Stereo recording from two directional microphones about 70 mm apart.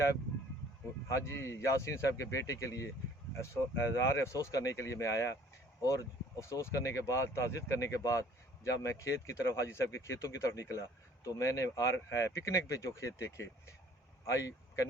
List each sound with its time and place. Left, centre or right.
1.0 s speech: left
6.4 s speech: left